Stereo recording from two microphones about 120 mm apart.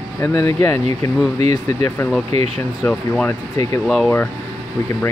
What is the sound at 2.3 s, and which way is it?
Speech, 60° right (ahead or behind).